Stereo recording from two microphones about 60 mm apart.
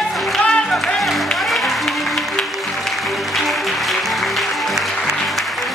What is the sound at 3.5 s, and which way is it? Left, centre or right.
Music, centre.